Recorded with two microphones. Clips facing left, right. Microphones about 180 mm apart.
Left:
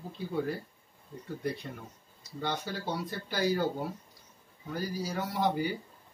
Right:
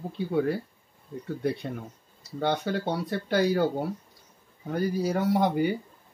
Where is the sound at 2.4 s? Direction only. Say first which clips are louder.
Right 8 dB; 65° right (ahead or behind).